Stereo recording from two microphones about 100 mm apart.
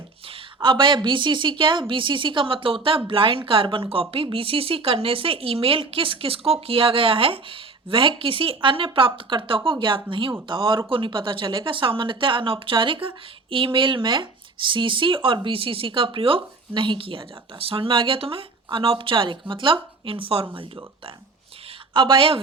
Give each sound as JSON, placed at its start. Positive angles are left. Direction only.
{"t": 0.3, "sound": "speech", "side_deg": -60}
{"t": 21.9, "sound": "speech", "side_deg": -55}